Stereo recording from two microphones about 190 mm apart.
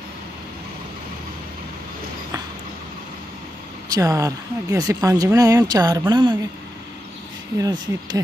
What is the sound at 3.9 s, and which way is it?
Speech, 15° right (ahead or behind).